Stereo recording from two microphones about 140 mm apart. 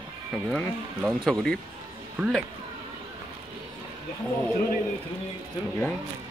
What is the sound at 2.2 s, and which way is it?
Speech, 15° right (ahead or behind).